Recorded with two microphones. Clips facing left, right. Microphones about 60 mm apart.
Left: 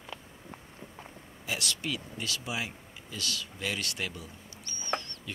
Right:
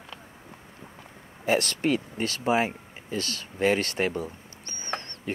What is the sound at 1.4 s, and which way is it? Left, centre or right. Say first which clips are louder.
Speech: right 11 dB; right.